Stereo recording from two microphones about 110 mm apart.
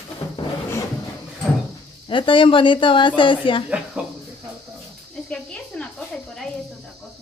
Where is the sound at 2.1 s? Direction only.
50° left (ahead or behind).